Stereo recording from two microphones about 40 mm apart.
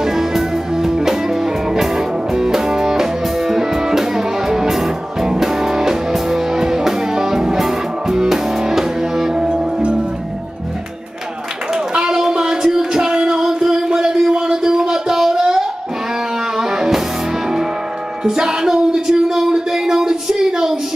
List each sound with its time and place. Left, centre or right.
0.0 s music: centre
11.7 s clapping: centre
12.6 s music: centre
18.2 s a sound: centre